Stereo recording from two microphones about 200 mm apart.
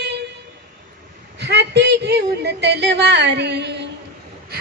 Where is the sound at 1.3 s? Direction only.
60° right (ahead or behind).